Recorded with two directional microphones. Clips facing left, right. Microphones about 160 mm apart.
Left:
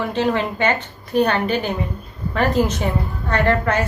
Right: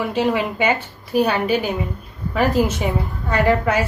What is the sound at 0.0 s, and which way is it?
A woman's voice, 10° right (ahead or behind).